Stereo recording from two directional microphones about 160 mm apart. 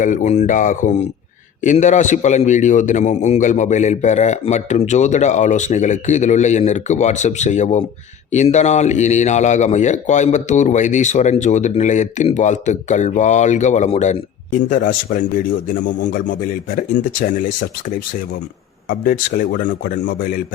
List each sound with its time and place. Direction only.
0.0 s a man's voice: 50° left (ahead or behind)
14.7 s speech: 55° left (ahead or behind)
18.9 s speech: 55° left (ahead or behind)